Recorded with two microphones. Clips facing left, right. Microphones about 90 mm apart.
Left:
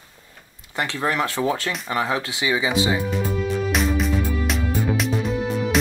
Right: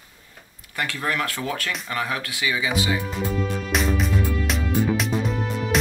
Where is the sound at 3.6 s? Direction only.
Centre (ahead or behind).